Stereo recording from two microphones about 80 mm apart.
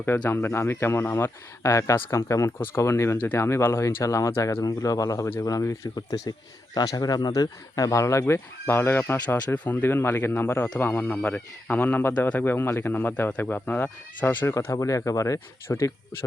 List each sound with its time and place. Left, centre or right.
0.3 s speech: left
4.6 s speech: left
14.7 s speech: left